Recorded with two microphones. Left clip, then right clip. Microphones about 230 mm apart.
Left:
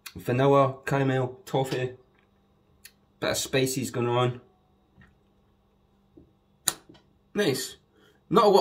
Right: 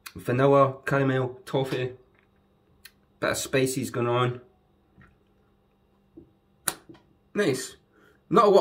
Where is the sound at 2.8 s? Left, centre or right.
Centre.